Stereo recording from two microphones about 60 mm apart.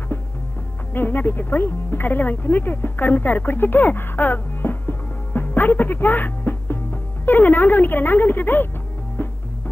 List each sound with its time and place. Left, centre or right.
0.9 s speech: left
9.2 s music: left